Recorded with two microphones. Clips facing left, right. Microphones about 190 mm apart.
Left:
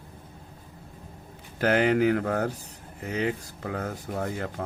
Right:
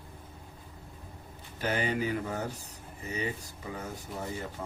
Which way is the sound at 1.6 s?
85° left.